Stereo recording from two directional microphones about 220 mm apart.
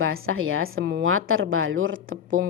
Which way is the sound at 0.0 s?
70° right (ahead or behind).